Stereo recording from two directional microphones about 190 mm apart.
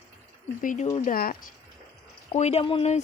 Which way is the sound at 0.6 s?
45° left (ahead or behind).